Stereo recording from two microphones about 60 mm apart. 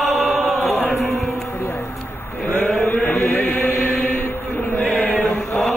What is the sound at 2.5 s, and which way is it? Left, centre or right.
Chant, left.